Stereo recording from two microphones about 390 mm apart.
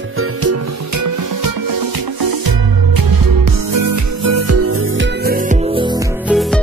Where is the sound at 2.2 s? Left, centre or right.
Right; by 6.4 s centre.